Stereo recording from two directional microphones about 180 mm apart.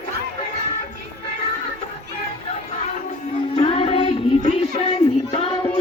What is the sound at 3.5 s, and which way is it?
Music, 30° left (ahead or behind).